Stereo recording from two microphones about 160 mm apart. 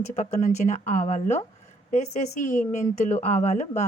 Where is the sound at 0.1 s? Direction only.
45° left (ahead or behind).